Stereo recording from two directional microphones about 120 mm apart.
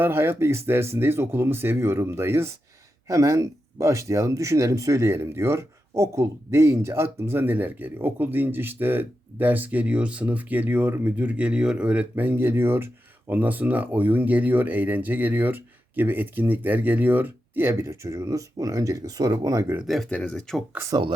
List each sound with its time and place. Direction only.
0.0 s speech: 20° right (ahead or behind)
19.9 s speech: 5° left (ahead or behind)